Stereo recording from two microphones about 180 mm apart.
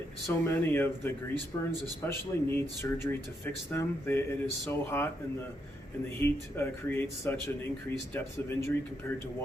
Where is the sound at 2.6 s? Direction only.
15° left (ahead or behind).